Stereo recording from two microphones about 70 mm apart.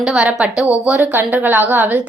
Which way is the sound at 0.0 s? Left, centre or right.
Centre.